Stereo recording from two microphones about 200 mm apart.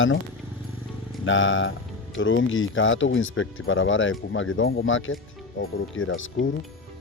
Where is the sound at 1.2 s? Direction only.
75° left (ahead or behind).